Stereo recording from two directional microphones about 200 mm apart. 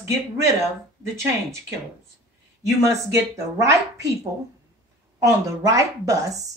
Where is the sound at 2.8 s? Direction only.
15° right (ahead or behind).